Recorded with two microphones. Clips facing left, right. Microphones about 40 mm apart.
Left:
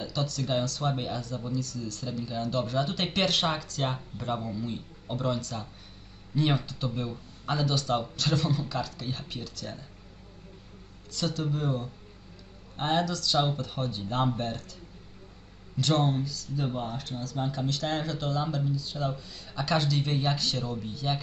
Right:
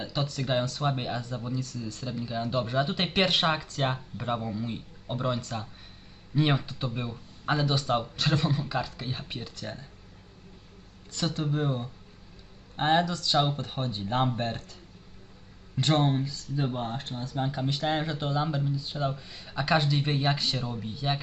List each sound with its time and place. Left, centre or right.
0.0 s speech: right
11.1 s speech: right
15.8 s speech: right
17.4 s speech: centre